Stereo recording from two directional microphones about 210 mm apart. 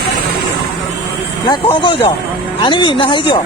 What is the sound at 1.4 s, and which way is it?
Speech, 20° left (ahead or behind).